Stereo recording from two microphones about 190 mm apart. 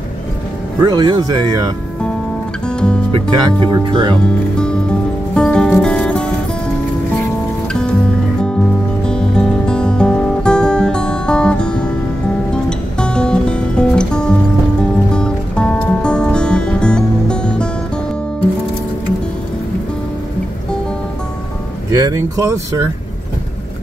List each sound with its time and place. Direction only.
0.8 s speech: 20° right (ahead or behind)
2.7 s music: 5° left (ahead or behind)
3.1 s speech: 25° right (ahead or behind)
4.2 s speech: 5° left (ahead or behind)
5.3 s music: 5° left (ahead or behind)
9.0 s music: 5° left (ahead or behind)
21.9 s speech: 15° right (ahead or behind)